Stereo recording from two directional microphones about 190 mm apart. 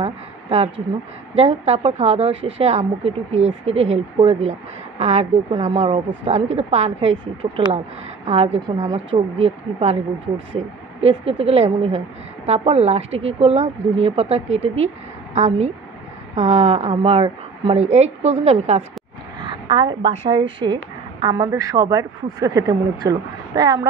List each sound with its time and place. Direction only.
0.0 s a sound: 30° right (ahead or behind)
1.3 s speech: 30° right (ahead or behind)
11.0 s speech: 30° right (ahead or behind)
19.4 s a woman's voice: 25° right (ahead or behind)